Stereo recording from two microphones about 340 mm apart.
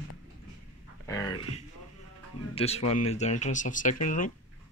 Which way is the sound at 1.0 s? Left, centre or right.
Centre.